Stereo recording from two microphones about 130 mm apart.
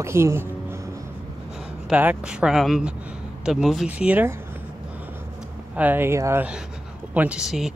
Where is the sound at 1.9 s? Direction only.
10° right (ahead or behind).